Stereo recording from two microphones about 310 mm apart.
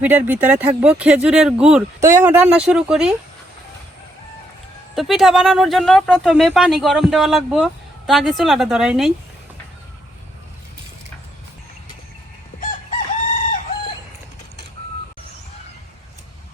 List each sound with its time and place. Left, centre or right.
0.0 s speech: centre
4.9 s speech: centre
12.5 s chicken: left